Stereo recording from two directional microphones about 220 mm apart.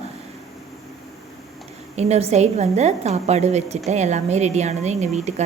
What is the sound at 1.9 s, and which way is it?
A woman's voice, 30° right (ahead or behind).